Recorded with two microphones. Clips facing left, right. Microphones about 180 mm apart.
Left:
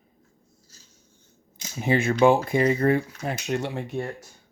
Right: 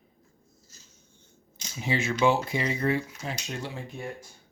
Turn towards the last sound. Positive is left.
turn(degrees=65)  # may be behind; listen again after turning